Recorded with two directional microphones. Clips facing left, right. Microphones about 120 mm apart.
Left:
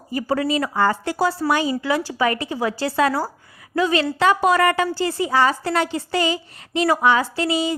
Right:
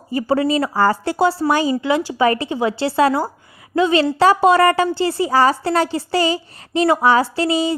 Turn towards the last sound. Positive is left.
turn(degrees=-35)  # may be behind; listen again after turning